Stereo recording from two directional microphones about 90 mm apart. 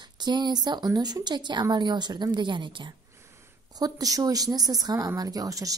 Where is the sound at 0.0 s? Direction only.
55° right (ahead or behind).